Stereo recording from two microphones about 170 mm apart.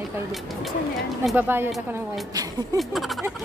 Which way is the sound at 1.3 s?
15° right (ahead or behind).